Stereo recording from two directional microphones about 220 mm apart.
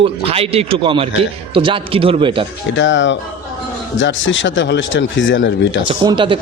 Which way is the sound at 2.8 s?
55° left (ahead or behind).